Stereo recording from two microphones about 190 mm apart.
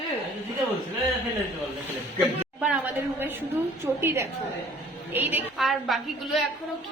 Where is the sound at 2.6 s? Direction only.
5° right (ahead or behind).